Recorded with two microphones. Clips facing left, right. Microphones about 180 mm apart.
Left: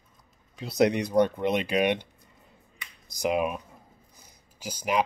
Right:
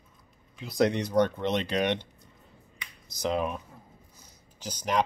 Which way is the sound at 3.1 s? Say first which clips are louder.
Left 3 dB; 15° left (ahead or behind).